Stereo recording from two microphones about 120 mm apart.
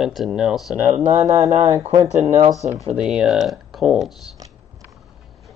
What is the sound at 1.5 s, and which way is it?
Speech, 55° right (ahead or behind).